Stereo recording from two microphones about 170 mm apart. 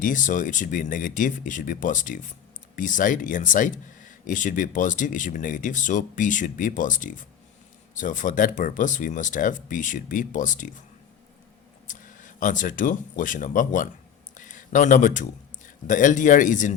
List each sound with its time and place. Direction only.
0.0 s speech: 50° left (ahead or behind)
11.9 s a man's voice: 50° left (ahead or behind)